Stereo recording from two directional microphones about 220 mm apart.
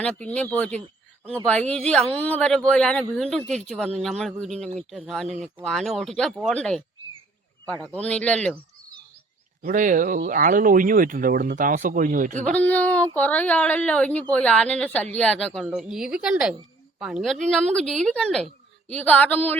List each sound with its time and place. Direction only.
0.0 s a woman's voice: 5° left (ahead or behind)
9.6 s speech: 35° right (ahead or behind)
12.5 s a woman's voice: 5° left (ahead or behind)